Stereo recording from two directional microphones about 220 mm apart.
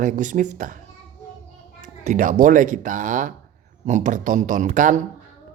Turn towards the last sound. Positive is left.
turn(degrees=-35)  # may be behind; listen again after turning